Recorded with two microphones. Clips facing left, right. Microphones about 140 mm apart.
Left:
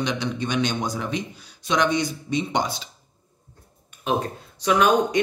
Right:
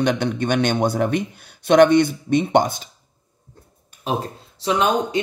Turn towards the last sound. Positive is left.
turn(degrees=-30)  # may be behind; listen again after turning